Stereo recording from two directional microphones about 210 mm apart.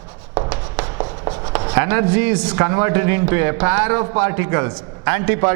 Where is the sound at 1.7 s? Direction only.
15° right (ahead or behind).